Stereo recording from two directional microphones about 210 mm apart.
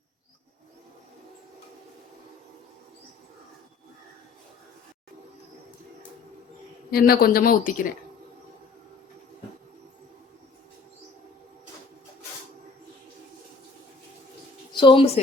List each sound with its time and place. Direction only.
6.9 s a man's voice: 45° left (ahead or behind)
14.7 s speech: 25° left (ahead or behind)